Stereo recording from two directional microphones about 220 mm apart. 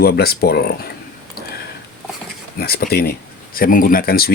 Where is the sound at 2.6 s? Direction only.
45° left (ahead or behind).